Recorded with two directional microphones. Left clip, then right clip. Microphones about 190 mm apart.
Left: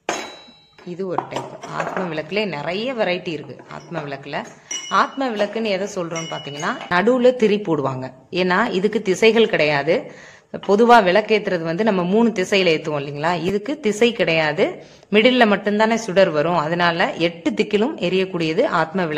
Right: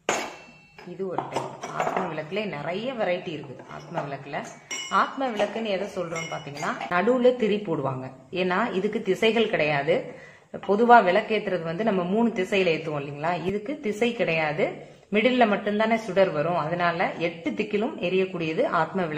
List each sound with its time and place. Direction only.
2.1 s speech: 40° left (ahead or behind)
4.8 s speech: 40° left (ahead or behind)